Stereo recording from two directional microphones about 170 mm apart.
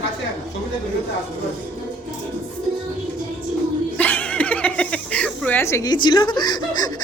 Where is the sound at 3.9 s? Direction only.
10° left (ahead or behind).